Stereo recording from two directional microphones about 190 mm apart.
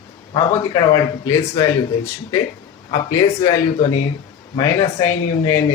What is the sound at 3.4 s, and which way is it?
Speech, 20° left (ahead or behind).